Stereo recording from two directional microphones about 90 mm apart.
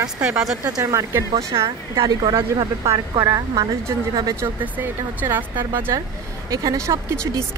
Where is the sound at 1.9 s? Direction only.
60° right (ahead or behind).